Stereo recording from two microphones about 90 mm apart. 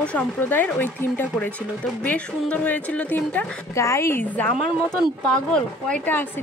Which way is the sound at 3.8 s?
30° left (ahead or behind).